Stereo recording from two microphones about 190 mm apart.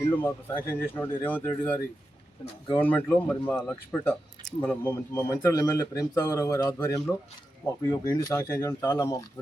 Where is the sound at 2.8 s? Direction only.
10° left (ahead or behind).